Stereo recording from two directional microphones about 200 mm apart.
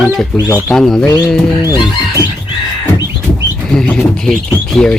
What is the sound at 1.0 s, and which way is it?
Music, 20° left (ahead or behind).